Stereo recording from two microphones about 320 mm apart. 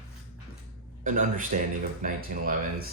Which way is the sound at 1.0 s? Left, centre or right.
Right.